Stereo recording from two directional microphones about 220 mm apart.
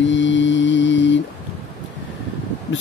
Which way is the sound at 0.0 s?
55° left (ahead or behind).